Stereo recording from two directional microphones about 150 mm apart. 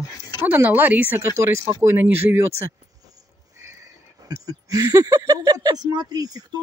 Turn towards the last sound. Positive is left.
turn(degrees=-25)  # may be behind; listen again after turning